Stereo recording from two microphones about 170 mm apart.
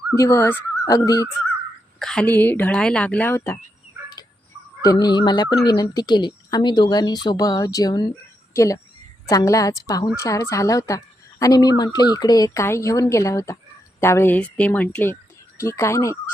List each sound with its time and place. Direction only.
0.2 s a woman's voice: 20° left (ahead or behind)
2.0 s a woman's voice: 5° left (ahead or behind)
4.8 s a woman's voice: 20° left (ahead or behind)